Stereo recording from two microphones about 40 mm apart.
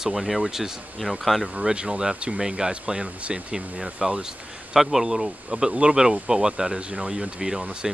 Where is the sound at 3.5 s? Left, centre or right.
Centre.